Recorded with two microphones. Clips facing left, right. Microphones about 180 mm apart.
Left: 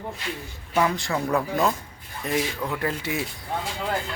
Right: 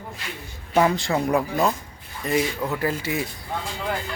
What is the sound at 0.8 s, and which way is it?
Speech, 30° right (ahead or behind).